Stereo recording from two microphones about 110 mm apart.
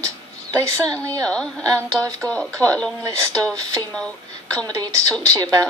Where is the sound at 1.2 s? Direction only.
10° left (ahead or behind).